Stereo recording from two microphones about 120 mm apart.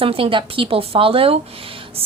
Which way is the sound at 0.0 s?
50° right (ahead or behind).